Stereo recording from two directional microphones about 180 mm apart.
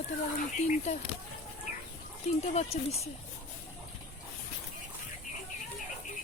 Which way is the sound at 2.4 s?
35° left (ahead or behind).